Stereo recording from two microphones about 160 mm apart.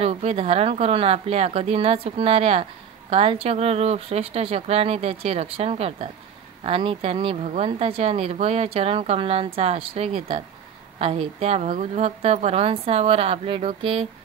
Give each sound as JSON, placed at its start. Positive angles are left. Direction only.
{"t": 0.0, "sound": "speech", "side_deg": -40}